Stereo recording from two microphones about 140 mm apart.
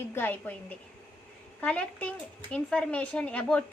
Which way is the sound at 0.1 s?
15° left (ahead or behind).